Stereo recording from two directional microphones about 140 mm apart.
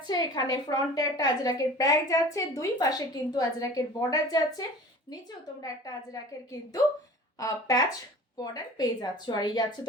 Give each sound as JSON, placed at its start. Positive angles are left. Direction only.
{"t": 0.1, "sound": "a woman's voice", "side_deg": 30}
{"t": 7.3, "sound": "a woman's voice", "side_deg": 25}